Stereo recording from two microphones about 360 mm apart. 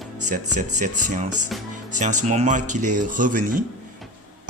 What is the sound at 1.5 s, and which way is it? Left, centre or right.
Speech, centre.